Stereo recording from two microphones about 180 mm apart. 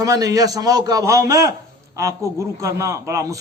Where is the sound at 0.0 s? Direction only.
20° right (ahead or behind).